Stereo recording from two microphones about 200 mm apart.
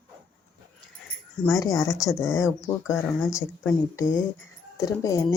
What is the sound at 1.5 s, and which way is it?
Speech, 15° left (ahead or behind).